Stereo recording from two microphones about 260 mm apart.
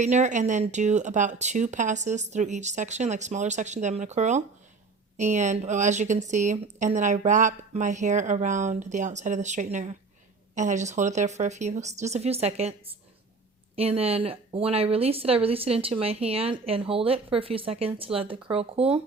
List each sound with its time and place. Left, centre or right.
0.0 s speech: right
13.7 s speech: right